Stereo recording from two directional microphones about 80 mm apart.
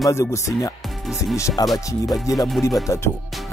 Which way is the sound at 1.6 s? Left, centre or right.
Left.